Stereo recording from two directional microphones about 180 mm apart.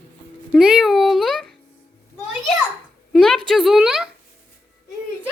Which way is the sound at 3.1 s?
Centre (ahead or behind).